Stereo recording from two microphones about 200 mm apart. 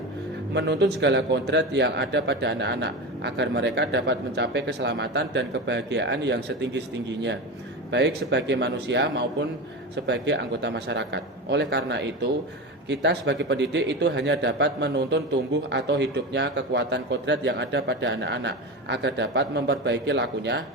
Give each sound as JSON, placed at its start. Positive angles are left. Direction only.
{"t": 0.5, "sound": "a man's voice", "side_deg": -60}